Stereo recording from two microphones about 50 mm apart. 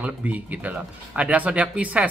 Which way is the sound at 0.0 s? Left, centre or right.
Right.